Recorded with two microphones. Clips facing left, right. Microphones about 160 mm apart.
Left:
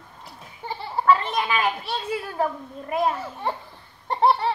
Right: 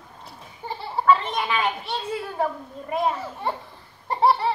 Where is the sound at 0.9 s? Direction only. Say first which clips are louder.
Even; 5° left (ahead or behind).